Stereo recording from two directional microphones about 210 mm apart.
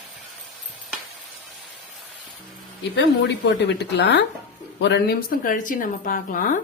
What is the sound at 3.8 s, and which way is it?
Speech, 55° left (ahead or behind).